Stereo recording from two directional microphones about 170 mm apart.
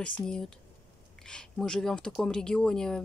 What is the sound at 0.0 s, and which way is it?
Speech, 5° left (ahead or behind).